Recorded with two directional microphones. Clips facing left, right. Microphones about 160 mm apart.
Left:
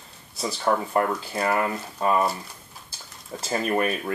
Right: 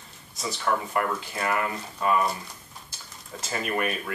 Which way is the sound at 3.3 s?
30° left (ahead or behind).